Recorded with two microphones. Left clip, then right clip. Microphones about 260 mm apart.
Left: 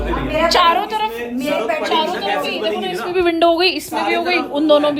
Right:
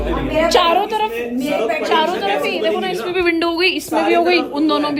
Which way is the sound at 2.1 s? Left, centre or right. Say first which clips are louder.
Right 1 dB; left.